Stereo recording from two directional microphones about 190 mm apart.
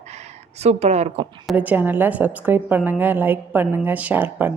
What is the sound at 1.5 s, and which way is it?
A woman's voice, 10° right (ahead or behind).